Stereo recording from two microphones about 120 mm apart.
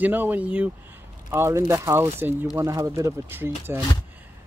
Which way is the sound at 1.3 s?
25° right (ahead or behind).